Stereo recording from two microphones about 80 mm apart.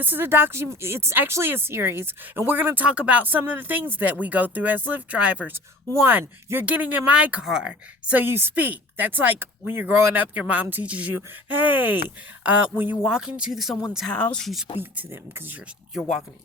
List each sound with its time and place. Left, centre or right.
0.0 s speech: right
5.9 s speech: right
7.4 s a woman's voice: centre
8.2 s speech: right
13.1 s speech: centre
14.1 s speech: centre
14.3 s speech: centre
14.8 s speech: right
16.0 s speech: centre